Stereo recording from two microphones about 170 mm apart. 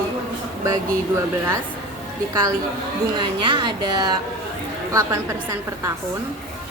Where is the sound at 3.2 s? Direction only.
25° right (ahead or behind).